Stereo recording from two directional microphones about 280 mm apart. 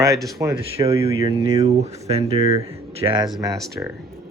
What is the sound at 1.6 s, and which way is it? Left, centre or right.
Speech, right.